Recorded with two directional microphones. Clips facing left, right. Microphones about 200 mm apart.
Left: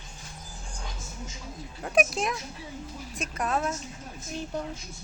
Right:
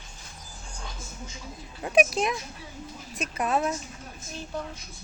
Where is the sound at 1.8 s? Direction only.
Centre (ahead or behind).